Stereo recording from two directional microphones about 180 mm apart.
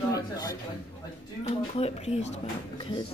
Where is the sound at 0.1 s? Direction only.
20° left (ahead or behind).